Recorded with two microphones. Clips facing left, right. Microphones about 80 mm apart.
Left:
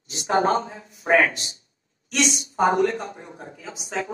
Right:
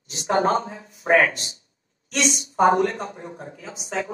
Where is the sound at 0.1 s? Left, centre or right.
Right.